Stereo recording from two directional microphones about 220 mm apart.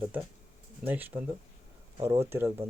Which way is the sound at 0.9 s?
10° right (ahead or behind).